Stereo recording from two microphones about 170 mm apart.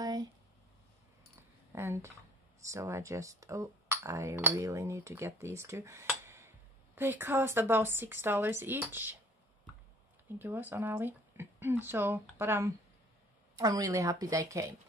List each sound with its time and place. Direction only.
0.0 s a sound: 25° right (ahead or behind)
1.7 s speech: 15° right (ahead or behind)
10.4 s speech: 10° right (ahead or behind)